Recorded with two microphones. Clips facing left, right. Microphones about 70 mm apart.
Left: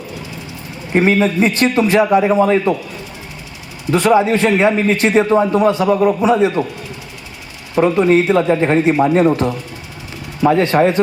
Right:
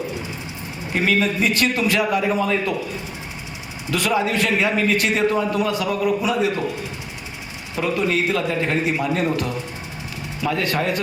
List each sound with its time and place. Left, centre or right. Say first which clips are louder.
0.9 s a man's voice: left 7 dB; left
3.9 s a man's voice: left 8 dB; left
7.8 s a man's voice: left 9 dB; left